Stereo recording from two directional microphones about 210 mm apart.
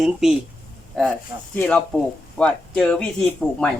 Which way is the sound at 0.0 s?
Centre (ahead or behind).